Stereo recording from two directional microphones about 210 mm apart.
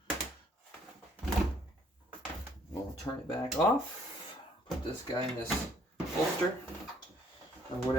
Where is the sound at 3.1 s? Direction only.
15° left (ahead or behind).